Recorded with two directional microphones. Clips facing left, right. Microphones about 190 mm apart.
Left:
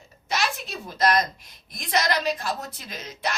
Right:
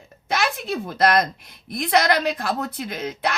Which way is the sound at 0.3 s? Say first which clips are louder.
Right 5 dB; 55° right (ahead or behind).